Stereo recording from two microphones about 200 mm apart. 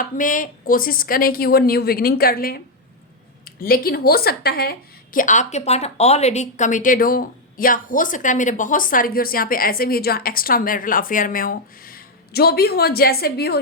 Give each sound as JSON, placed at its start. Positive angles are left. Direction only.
{"t": 0.0, "sound": "a woman's voice", "side_deg": 40}
{"t": 3.6, "sound": "a woman's voice", "side_deg": 50}